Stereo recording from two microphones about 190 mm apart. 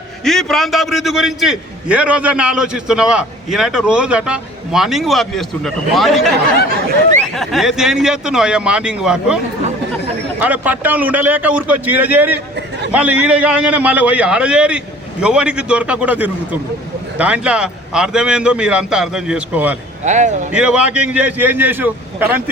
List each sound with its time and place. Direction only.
0.3 s a man's voice: centre (ahead or behind)
7.3 s a man's voice: centre (ahead or behind)
10.4 s a man's voice: 10° right (ahead or behind)
20.1 s speech: 40° right (ahead or behind)
20.5 s a man's voice: 5° right (ahead or behind)